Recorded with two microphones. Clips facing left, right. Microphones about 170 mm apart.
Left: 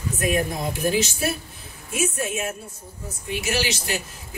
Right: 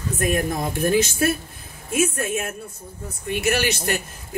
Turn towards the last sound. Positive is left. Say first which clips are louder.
# right 3 dB
turn(degrees=-55)  # may be behind; listen again after turning